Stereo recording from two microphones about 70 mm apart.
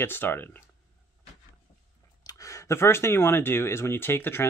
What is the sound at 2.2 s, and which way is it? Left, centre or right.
Speech, left.